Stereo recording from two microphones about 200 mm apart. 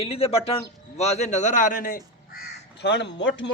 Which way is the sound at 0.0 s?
30° left (ahead or behind).